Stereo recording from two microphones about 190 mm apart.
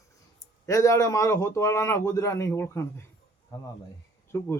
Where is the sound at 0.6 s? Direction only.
15° left (ahead or behind).